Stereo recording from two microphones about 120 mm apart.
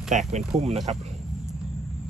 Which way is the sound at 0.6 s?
65° right (ahead or behind).